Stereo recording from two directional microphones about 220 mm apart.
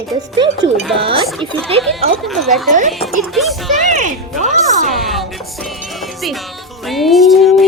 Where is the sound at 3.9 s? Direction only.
35° right (ahead or behind).